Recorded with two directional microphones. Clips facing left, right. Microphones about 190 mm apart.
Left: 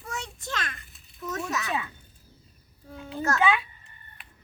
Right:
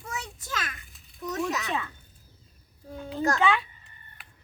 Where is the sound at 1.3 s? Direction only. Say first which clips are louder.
Right 2 dB; 15° right (ahead or behind).